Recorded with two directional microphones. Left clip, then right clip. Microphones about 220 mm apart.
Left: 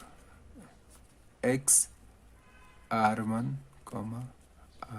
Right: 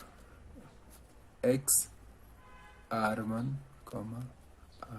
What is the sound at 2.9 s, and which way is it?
Speech, 40° left (ahead or behind).